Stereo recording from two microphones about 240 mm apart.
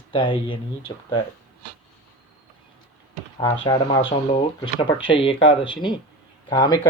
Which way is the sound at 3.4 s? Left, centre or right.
Centre.